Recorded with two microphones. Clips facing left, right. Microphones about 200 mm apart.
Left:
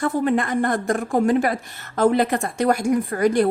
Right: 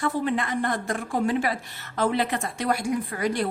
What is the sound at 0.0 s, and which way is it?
A woman's voice, 50° left (ahead or behind).